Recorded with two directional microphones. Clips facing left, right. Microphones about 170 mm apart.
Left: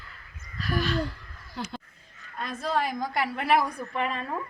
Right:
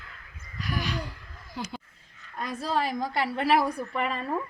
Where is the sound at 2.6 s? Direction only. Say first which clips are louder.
Left 1 dB; 30° right (ahead or behind).